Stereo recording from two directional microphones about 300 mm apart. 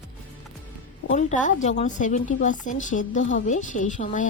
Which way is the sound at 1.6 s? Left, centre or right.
Left.